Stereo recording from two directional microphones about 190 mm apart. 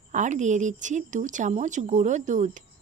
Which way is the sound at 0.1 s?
40° right (ahead or behind).